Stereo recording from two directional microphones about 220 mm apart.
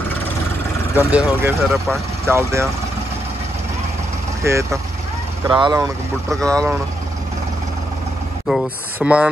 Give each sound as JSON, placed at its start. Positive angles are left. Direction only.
{"t": 0.9, "sound": "speech", "side_deg": -5}
{"t": 4.4, "sound": "speech", "side_deg": -15}
{"t": 6.4, "sound": "speech", "side_deg": 5}
{"t": 8.5, "sound": "speech", "side_deg": -5}